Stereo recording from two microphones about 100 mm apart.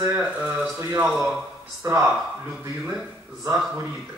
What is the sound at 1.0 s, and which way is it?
Speech, 5° right (ahead or behind).